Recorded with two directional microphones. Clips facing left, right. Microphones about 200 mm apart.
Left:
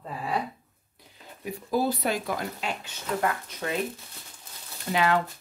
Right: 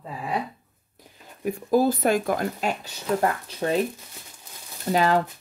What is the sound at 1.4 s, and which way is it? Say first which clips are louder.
Speech: right 6 dB; 50° right (ahead or behind).